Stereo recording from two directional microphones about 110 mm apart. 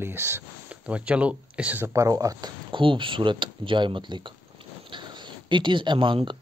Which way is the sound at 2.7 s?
50° right (ahead or behind).